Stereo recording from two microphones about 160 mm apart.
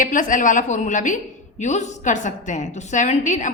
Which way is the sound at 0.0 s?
55° left (ahead or behind).